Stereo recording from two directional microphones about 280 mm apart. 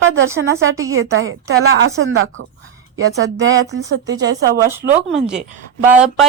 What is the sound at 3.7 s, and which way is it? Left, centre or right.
Speech, right.